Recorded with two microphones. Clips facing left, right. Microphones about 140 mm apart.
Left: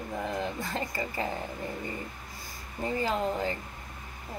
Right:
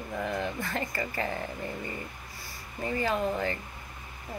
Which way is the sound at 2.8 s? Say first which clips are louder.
Even; 15° left (ahead or behind).